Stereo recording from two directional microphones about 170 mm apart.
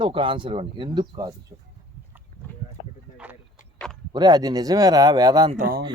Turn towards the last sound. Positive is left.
turn(degrees=-60)  # may be behind; listen again after turning